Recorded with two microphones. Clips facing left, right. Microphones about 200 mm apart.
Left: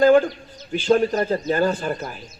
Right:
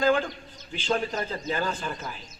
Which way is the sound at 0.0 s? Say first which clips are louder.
Left 9 dB; 50° left (ahead or behind).